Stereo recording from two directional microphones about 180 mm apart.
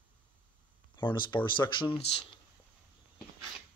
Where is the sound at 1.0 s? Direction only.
25° left (ahead or behind).